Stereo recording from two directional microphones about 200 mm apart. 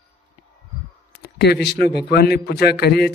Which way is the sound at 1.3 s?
55° left (ahead or behind).